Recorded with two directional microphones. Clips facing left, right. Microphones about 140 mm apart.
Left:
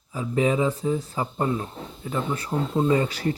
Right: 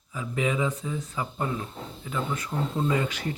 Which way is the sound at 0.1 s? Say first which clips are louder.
Left 5 dB; 35° left (ahead or behind).